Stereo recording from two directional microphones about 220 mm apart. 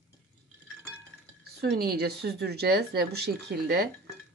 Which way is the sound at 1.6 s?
45° right (ahead or behind).